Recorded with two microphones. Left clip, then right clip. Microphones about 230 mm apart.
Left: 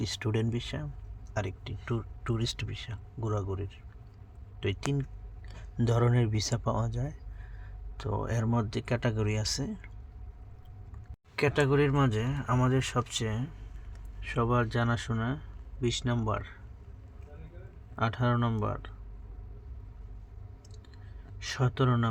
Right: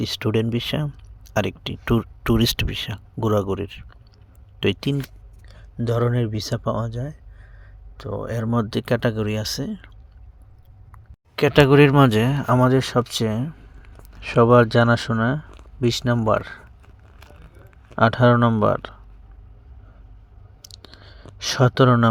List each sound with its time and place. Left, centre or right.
0.0 s speech: right
5.5 s speech: centre
11.3 s speech: right
17.9 s speech: right
20.7 s clicking: right